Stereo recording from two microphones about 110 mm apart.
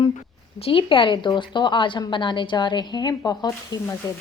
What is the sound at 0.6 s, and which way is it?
A woman's voice, 60° left (ahead or behind).